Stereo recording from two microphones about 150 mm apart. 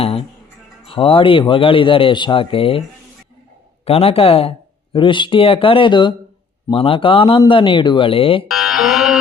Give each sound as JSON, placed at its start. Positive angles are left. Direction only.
{"t": 0.0, "sound": "music", "side_deg": 40}
{"t": 0.9, "sound": "speech", "side_deg": 35}
{"t": 3.8, "sound": "speech", "side_deg": 40}
{"t": 8.4, "sound": "speech", "side_deg": -5}